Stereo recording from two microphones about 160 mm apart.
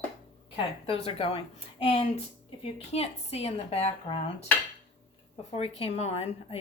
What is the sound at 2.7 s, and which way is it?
A woman's voice, 40° left (ahead or behind).